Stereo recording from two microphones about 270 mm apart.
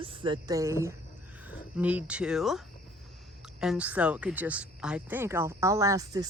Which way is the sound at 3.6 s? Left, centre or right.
Centre.